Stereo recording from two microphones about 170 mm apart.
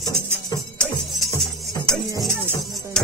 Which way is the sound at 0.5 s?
25° left (ahead or behind).